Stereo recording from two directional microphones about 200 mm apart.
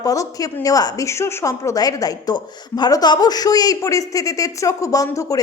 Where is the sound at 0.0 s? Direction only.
15° left (ahead or behind).